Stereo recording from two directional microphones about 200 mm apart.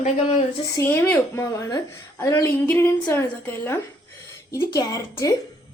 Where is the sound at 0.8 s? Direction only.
10° left (ahead or behind).